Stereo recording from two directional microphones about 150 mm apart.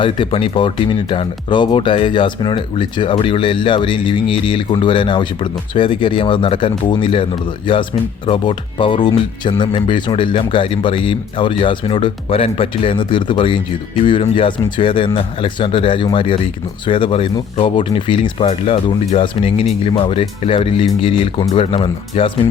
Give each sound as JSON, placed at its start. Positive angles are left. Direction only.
{"t": 0.0, "sound": "speech", "side_deg": 35}